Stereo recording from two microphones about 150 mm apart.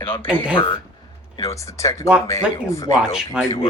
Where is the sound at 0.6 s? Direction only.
35° left (ahead or behind).